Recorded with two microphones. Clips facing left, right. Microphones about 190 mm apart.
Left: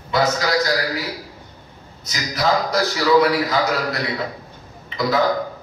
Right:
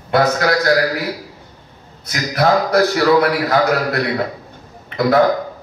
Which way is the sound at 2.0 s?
60° right (ahead or behind).